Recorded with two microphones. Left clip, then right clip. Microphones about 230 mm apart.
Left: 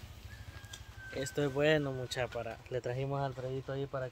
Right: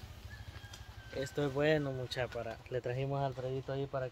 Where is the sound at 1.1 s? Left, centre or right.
Left.